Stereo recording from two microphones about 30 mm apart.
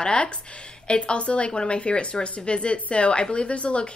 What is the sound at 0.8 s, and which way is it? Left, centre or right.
A woman's voice, left.